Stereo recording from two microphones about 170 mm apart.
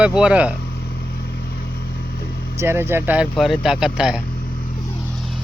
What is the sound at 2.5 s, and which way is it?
Speech, 15° right (ahead or behind).